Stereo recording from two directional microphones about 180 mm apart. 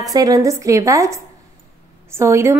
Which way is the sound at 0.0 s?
20° right (ahead or behind).